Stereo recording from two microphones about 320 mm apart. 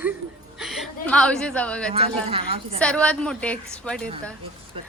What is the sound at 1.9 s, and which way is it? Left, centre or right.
Speech, centre.